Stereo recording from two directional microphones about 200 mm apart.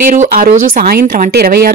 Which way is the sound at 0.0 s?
45° right (ahead or behind).